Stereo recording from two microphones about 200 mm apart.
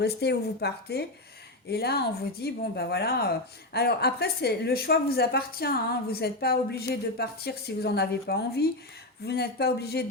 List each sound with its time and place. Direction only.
0.0 s speech: 55° left (ahead or behind)